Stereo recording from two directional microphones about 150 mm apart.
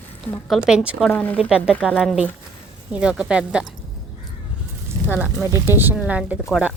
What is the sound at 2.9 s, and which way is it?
Speech, 5° right (ahead or behind).